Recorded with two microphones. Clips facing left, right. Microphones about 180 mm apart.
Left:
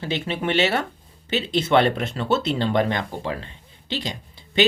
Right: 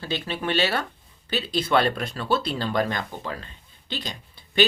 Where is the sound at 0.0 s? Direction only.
25° left (ahead or behind).